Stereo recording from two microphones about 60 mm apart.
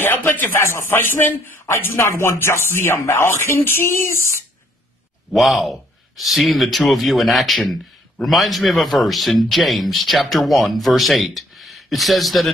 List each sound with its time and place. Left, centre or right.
0.0 s speech: left
0.7 s speech: left
0.9 s speech: left
5.3 s a man's voice: centre